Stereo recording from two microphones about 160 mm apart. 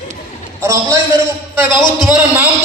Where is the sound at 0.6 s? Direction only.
20° right (ahead or behind).